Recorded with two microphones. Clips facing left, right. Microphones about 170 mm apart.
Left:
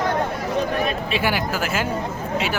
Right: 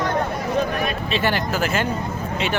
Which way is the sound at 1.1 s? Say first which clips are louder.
Right 1 dB; 10° left (ahead or behind).